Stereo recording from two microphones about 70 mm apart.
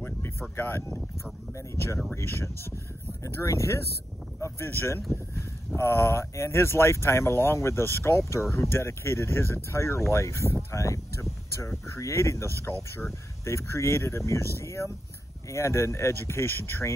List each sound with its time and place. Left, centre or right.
0.2 s speech: left
1.5 s speech: left
3.3 s speech: left
4.4 s speech: left